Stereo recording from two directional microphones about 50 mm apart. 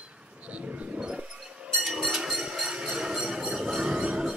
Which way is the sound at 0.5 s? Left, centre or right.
Right.